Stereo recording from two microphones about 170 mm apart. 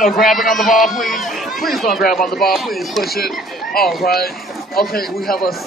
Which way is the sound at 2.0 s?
55° left (ahead or behind).